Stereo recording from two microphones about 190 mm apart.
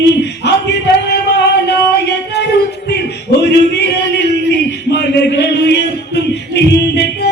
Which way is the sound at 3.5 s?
60° left (ahead or behind).